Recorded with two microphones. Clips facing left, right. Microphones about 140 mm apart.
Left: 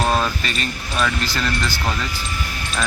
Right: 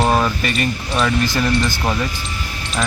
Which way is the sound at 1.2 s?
20° right (ahead or behind).